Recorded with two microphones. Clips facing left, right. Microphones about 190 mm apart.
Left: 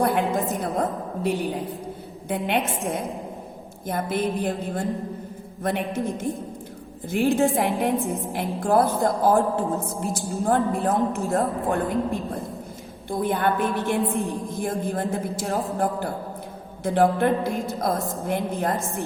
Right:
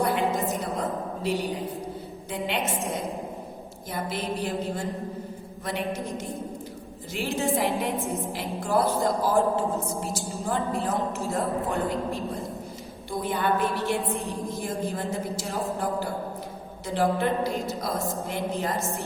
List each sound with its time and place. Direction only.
0.0 s a sound: 55° left (ahead or behind)
2.3 s a woman's voice: 55° left (ahead or behind)
7.3 s a woman's voice: 55° left (ahead or behind)
16.8 s a woman's voice: 55° left (ahead or behind)